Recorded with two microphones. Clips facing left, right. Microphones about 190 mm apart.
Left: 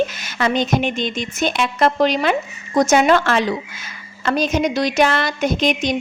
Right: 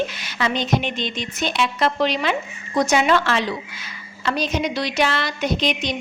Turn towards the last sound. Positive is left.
turn(degrees=45)  # may be behind; listen again after turning